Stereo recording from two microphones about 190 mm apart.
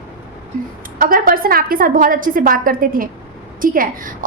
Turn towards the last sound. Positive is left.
turn(degrees=-45)  # may be behind; listen again after turning